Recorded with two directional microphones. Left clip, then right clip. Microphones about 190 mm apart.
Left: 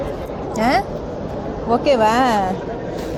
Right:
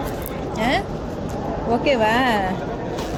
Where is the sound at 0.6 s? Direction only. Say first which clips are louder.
Left 4 dB; 25° left (ahead or behind).